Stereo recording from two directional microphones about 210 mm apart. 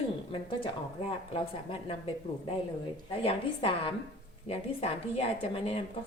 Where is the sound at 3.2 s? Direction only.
25° left (ahead or behind).